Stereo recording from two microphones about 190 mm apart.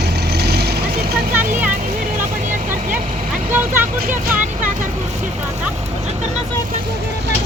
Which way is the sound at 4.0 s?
50° right (ahead or behind).